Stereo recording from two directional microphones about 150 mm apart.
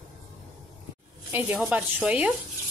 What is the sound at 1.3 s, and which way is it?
Speech, 10° right (ahead or behind).